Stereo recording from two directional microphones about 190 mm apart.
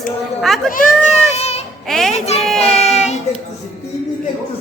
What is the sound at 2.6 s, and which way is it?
Child singing, 35° left (ahead or behind).